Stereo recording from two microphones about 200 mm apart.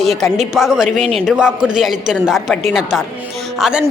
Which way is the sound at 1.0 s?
30° right (ahead or behind).